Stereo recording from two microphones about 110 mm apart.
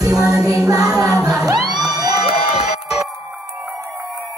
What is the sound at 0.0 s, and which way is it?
Music, 30° right (ahead or behind).